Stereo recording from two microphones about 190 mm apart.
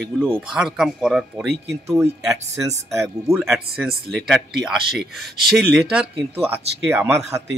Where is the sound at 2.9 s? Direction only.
15° right (ahead or behind).